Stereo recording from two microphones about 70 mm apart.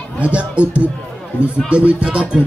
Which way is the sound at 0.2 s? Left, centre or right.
Centre.